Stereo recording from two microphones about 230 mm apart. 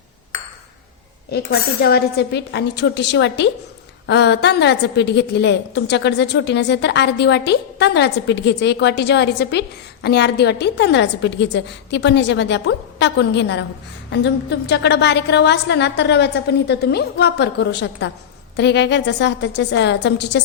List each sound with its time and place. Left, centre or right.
1.8 s a woman's voice: left